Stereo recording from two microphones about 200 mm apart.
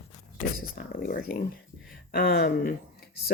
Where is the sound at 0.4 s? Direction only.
45° left (ahead or behind).